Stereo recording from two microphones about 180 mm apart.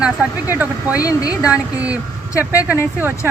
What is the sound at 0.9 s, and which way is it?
Speech, 20° left (ahead or behind).